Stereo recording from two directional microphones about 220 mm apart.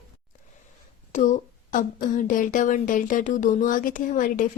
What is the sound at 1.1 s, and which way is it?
A woman's voice, 35° left (ahead or behind).